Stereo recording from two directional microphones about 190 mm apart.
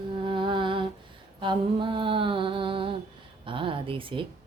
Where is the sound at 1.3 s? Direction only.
25° right (ahead or behind).